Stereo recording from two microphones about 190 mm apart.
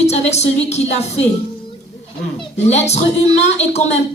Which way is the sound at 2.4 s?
35° left (ahead or behind).